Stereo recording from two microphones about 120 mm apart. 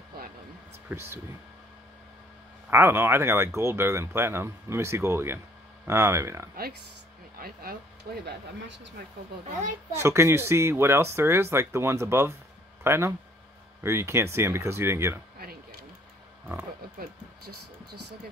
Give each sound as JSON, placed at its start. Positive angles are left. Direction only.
{"t": 0.8, "sound": "speech", "side_deg": -20}
{"t": 2.7, "sound": "speech", "side_deg": -20}
{"t": 9.6, "sound": "speech", "side_deg": -80}
{"t": 10.0, "sound": "speech", "side_deg": -20}